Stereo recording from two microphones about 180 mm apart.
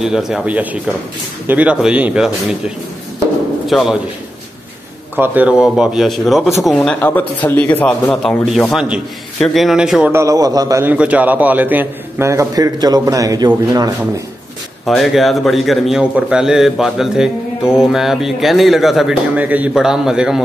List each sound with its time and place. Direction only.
0.0 s a man's voice: 5° right (ahead or behind)
3.6 s a man's voice: centre (ahead or behind)
5.1 s a man's voice: 10° right (ahead or behind)
10.1 s a man's voice: 20° right (ahead or behind)
14.9 s a man's voice: centre (ahead or behind)